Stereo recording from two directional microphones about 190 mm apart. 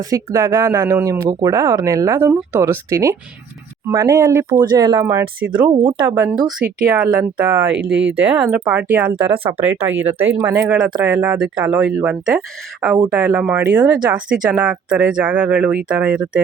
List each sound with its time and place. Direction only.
0.1 s speech: 20° right (ahead or behind)